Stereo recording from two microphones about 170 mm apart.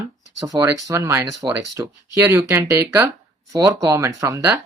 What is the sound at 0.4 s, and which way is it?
Speech, 20° right (ahead or behind).